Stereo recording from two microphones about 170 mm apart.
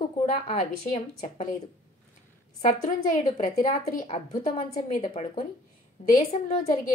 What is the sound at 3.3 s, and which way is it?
A woman's voice, 45° left (ahead or behind).